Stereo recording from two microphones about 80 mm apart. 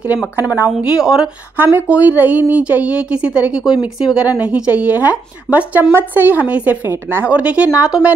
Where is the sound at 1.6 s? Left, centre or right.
Right.